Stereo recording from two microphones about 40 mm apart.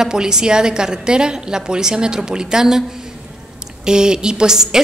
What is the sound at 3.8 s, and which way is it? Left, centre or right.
Speech, centre.